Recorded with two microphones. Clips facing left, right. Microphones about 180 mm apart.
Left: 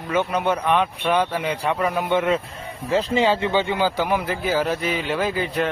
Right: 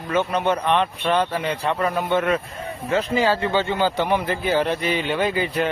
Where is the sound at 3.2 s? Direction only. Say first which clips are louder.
Left 1 dB; 20° left (ahead or behind).